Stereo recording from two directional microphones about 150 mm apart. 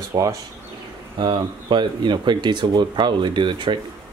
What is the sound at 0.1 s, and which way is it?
Speech, 20° right (ahead or behind).